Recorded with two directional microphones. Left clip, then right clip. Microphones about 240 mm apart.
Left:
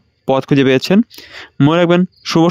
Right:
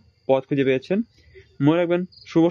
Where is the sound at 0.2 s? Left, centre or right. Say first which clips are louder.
Left 7 dB; left.